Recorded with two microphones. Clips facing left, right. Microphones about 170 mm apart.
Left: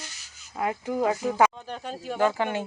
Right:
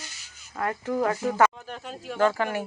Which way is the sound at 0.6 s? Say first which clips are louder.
Even; 15° left (ahead or behind).